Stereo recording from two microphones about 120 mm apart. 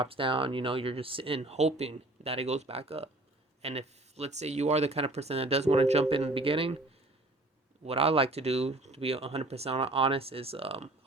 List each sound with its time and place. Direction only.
0.0 s speech: 45° right (ahead or behind)
7.9 s speech: 55° right (ahead or behind)